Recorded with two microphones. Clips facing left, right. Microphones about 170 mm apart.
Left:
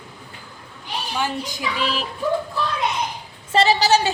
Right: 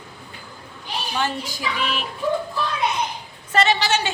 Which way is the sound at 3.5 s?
35° left (ahead or behind).